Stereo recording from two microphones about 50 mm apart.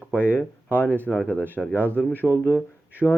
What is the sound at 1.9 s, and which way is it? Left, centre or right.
Speech, left.